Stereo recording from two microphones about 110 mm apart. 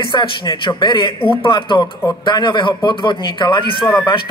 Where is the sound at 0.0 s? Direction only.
50° left (ahead or behind).